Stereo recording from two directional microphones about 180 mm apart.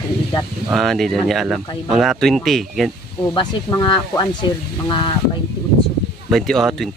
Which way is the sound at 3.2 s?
25° left (ahead or behind).